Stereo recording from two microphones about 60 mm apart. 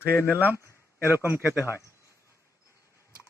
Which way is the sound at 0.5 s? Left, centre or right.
Left.